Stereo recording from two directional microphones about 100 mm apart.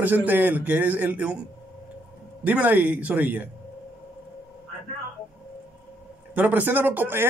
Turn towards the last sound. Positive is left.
turn(degrees=-20)  # may be behind; listen again after turning